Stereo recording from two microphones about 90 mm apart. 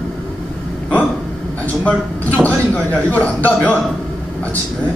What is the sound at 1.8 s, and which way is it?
A man's voice, 15° left (ahead or behind).